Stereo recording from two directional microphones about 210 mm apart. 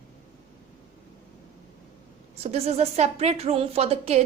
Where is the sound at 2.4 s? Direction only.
30° right (ahead or behind).